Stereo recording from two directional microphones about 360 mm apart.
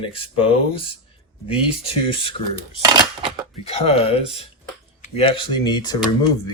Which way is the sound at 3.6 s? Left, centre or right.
Centre.